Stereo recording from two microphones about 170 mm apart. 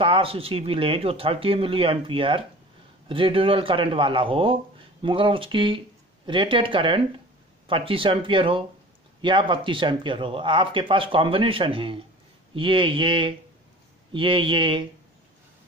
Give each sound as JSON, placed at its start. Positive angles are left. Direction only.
{"t": 0.0, "sound": "speech", "side_deg": -30}